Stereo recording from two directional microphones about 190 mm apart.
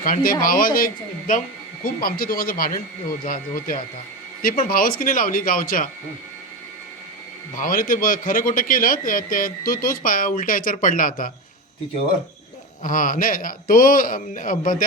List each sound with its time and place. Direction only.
0.0 s a man's voice: 45° left (ahead or behind)
7.5 s a man's voice: 45° left (ahead or behind)
12.8 s a man's voice: 45° left (ahead or behind)